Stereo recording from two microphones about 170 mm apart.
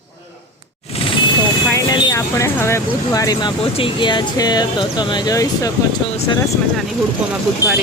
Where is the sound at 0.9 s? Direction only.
35° left (ahead or behind).